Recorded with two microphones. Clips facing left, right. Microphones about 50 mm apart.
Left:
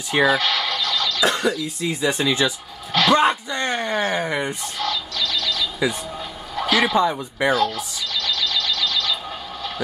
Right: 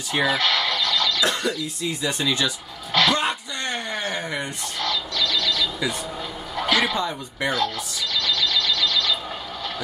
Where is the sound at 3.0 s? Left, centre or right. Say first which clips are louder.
Left 4 dB; left.